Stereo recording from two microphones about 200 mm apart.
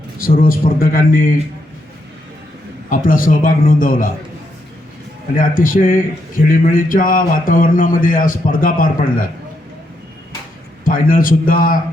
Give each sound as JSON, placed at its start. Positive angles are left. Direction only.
{"t": 0.2, "sound": "speech", "side_deg": 45}
{"t": 2.9, "sound": "speech", "side_deg": 45}
{"t": 5.4, "sound": "speech", "side_deg": 45}
{"t": 10.8, "sound": "speech", "side_deg": 45}